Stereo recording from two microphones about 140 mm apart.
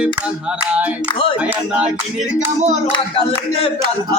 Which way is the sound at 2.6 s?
55° right (ahead or behind).